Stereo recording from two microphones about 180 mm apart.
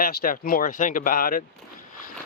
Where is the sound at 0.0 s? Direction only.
55° left (ahead or behind).